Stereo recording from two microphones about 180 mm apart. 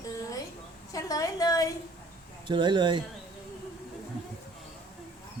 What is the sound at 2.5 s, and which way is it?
Speech, 25° right (ahead or behind).